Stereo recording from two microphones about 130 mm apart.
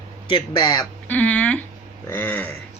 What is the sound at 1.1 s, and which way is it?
Speech, 10° left (ahead or behind).